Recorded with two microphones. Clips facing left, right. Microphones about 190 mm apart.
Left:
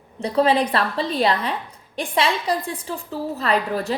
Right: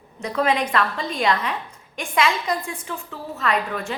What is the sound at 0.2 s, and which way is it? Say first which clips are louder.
A woman's voice: left 4 dB; 30° left (ahead or behind).